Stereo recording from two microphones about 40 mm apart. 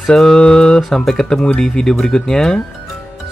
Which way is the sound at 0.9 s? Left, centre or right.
Centre.